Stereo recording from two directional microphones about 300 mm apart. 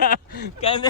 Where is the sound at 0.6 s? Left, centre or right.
Centre.